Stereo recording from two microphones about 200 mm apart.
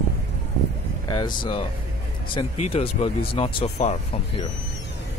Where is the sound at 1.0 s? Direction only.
20° left (ahead or behind).